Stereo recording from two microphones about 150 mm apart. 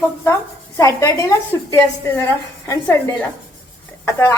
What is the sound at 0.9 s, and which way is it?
A woman's voice, 20° left (ahead or behind).